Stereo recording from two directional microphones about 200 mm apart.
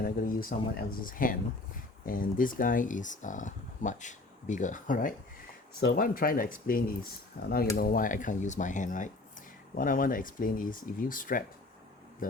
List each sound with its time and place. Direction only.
0.0 s speech: 45° left (ahead or behind)